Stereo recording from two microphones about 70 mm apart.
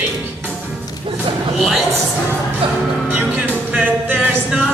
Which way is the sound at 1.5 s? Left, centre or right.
Centre.